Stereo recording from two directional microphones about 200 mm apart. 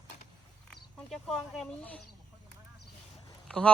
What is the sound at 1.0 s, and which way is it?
Speech, centre (ahead or behind).